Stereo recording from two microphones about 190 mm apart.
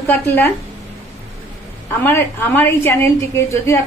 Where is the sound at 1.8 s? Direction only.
10° left (ahead or behind).